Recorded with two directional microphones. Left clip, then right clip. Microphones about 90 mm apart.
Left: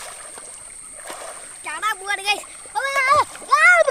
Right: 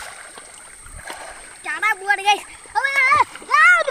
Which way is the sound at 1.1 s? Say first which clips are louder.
Left 1 dB; 5° left (ahead or behind).